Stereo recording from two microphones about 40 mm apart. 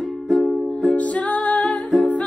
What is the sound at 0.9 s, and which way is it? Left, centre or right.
Music, left.